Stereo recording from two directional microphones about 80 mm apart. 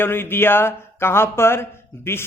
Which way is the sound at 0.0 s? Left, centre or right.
Left.